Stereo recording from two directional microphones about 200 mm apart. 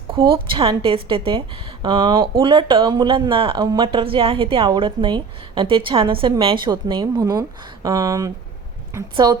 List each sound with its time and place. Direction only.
0.1 s a woman's voice: 25° right (ahead or behind)